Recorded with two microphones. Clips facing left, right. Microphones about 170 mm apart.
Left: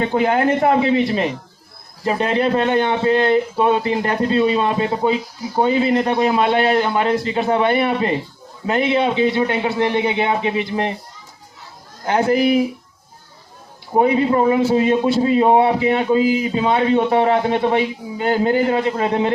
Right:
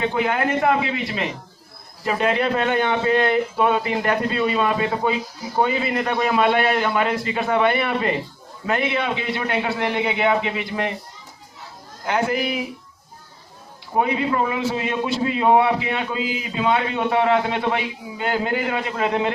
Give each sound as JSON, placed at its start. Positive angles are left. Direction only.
{"t": 0.1, "sound": "a man's voice", "side_deg": 35}
{"t": 12.0, "sound": "a man's voice", "side_deg": 40}
{"t": 13.9, "sound": "a man's voice", "side_deg": 35}